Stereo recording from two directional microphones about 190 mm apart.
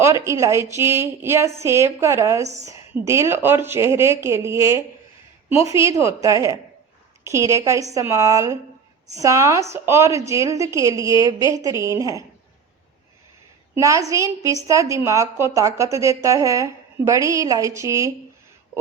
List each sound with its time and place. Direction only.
0.0 s a woman's voice: 15° right (ahead or behind)
13.7 s a woman's voice: 15° right (ahead or behind)